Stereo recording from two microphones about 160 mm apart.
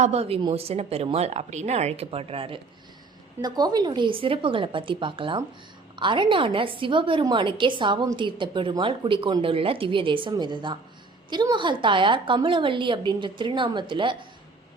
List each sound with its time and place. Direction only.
0.0 s a woman's voice: 40° right (ahead or behind)
3.4 s a woman's voice: 25° right (ahead or behind)